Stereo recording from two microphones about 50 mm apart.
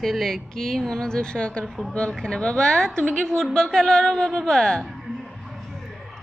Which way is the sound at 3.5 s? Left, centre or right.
Centre.